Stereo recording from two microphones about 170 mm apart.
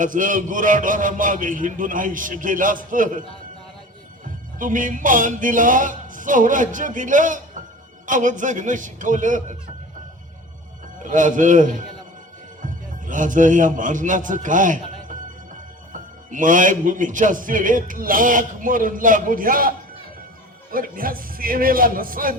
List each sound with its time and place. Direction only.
0.0 s a man's voice: 50° right (ahead or behind)
4.6 s a man's voice: 50° right (ahead or behind)
11.0 s a man's voice: 50° right (ahead or behind)